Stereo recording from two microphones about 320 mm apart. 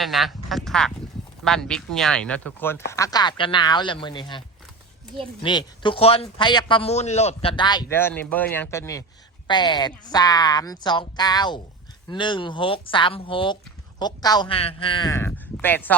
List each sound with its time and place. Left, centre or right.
0.0 s a man's voice: centre